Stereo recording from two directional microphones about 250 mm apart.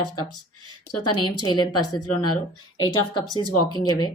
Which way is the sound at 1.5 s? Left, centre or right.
Centre.